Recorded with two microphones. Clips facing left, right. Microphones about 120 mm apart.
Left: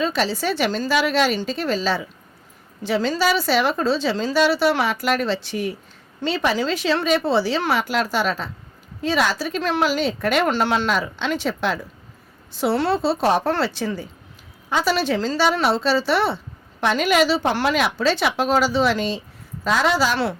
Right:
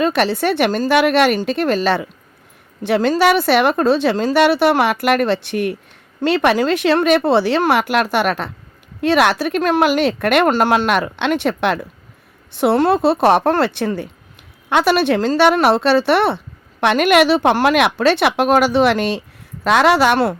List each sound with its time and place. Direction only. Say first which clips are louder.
0.0 s speech: right 6 dB; 60° right (ahead or behind)